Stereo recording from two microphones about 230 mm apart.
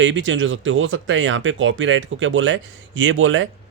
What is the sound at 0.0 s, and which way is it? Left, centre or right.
Speech, right.